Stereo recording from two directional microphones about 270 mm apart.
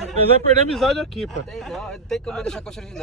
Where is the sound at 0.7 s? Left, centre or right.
Centre.